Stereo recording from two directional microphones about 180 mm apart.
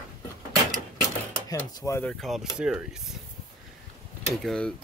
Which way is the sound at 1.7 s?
15° left (ahead or behind).